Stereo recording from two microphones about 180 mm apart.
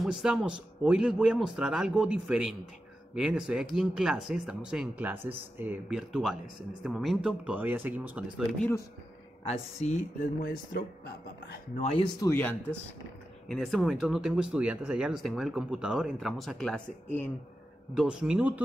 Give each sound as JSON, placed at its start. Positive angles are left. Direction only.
{"t": 0.0, "sound": "speech", "side_deg": -5}
{"t": 8.5, "sound": "speech", "side_deg": 10}
{"t": 9.5, "sound": "speech", "side_deg": 40}
{"t": 11.7, "sound": "speech", "side_deg": 35}
{"t": 12.2, "sound": "speech", "side_deg": 15}
{"t": 13.5, "sound": "speech", "side_deg": 0}
{"t": 17.9, "sound": "speech", "side_deg": -5}